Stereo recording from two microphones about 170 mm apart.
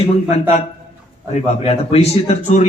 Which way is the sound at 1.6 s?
40° left (ahead or behind).